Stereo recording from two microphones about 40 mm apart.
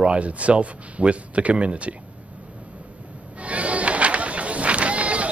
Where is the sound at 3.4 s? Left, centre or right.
Right.